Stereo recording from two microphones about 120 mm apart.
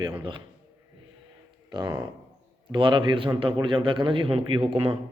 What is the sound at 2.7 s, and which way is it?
A man's voice, 40° right (ahead or behind).